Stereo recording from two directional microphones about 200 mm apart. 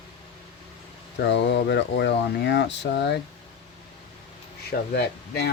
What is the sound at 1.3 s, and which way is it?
Speech, 60° left (ahead or behind).